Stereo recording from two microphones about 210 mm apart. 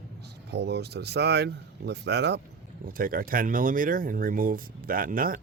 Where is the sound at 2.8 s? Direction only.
40° right (ahead or behind).